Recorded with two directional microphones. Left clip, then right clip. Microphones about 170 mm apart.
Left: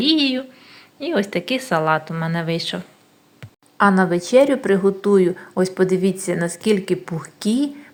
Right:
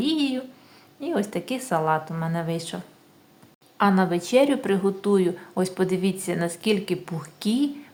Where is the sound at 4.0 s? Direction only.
15° left (ahead or behind).